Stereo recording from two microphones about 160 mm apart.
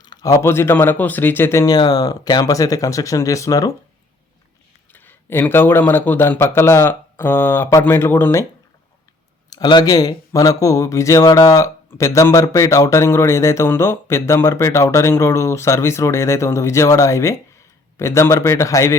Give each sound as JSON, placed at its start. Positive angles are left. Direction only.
{"t": 0.0, "sound": "speech", "side_deg": 25}
{"t": 4.9, "sound": "speech", "side_deg": 10}
{"t": 9.5, "sound": "speech", "side_deg": 25}